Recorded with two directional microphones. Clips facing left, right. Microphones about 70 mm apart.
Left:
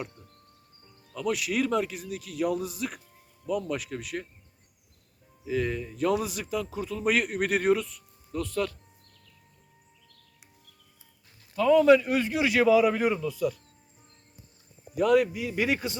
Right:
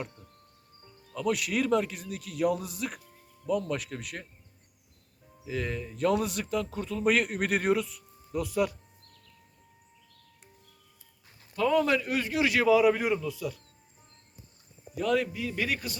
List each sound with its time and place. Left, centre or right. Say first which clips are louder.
1.1 s a man's voice: even; centre
5.5 s a man's voice: left 4 dB; centre
11.5 s a man's voice: left 6 dB; centre
14.9 s speech: left 5 dB; centre
15.6 s speech: left 6 dB; left